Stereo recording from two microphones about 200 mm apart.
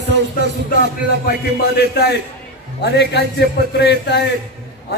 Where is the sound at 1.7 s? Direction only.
55° left (ahead or behind).